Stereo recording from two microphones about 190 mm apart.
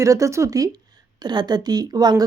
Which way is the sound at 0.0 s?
15° right (ahead or behind).